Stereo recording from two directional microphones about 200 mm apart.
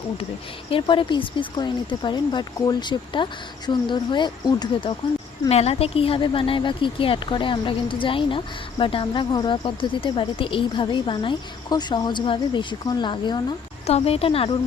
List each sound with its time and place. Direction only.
0.7 s speech: 25° left (ahead or behind)